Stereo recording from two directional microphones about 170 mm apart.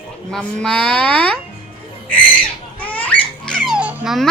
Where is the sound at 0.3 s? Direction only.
5° left (ahead or behind).